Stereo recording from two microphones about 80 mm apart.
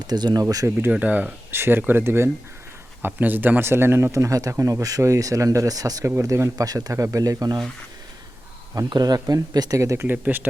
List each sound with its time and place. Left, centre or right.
0.1 s speech: right
0.9 s a man's voice: centre; by 7.6 s right
8.9 s speech: right
10.2 s a man's voice: right